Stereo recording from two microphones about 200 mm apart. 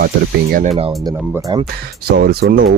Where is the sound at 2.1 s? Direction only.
50° right (ahead or behind).